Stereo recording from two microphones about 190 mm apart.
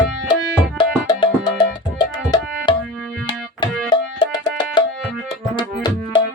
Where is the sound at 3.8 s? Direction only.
20° left (ahead or behind).